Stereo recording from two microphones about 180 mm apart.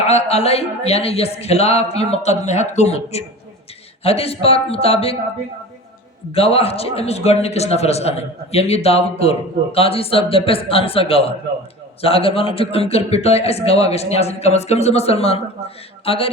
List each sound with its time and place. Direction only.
0.0 s a man's voice: 35° left (ahead or behind)
6.3 s a man's voice: 35° left (ahead or behind)